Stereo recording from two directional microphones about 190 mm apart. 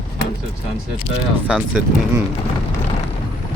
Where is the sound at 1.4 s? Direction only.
5° right (ahead or behind).